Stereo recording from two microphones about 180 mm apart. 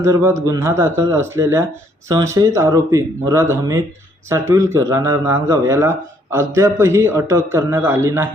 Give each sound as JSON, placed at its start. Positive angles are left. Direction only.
{"t": 0.0, "sound": "a man's voice", "side_deg": -15}